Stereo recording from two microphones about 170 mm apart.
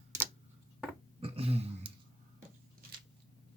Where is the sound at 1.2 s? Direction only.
35° right (ahead or behind).